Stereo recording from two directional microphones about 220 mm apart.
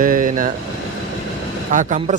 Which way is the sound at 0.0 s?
35° right (ahead or behind).